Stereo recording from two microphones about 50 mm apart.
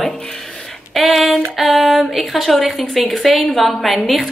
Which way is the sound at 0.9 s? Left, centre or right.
Centre.